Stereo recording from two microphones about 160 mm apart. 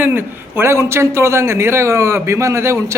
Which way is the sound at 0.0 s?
15° right (ahead or behind).